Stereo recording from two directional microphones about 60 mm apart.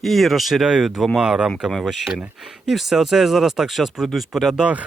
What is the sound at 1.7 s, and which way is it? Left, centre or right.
Speech, centre.